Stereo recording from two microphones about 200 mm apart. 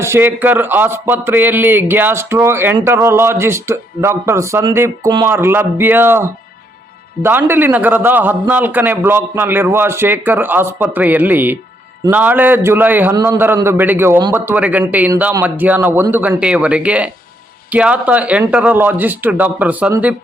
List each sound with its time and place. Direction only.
0.0 s a man's voice: 10° right (ahead or behind)